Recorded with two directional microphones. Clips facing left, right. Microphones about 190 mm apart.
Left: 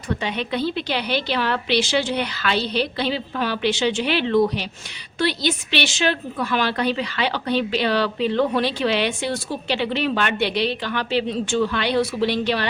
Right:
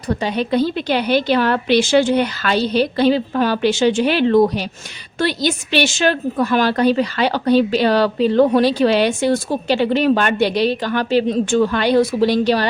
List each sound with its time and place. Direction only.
0.1 s a woman's voice: 40° right (ahead or behind)